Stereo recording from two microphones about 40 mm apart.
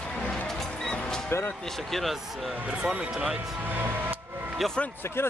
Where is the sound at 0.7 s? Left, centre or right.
Centre.